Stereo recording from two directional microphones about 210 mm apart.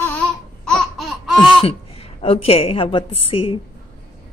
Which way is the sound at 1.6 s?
30° left (ahead or behind).